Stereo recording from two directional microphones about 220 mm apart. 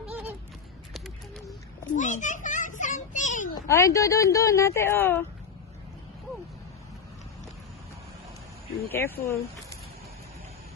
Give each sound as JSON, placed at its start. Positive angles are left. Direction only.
{"t": 0.9, "sound": "a sound", "side_deg": 0}
{"t": 1.9, "sound": "children playing", "side_deg": 35}
{"t": 3.5, "sound": "speech", "side_deg": 15}
{"t": 8.9, "sound": "speech", "side_deg": 10}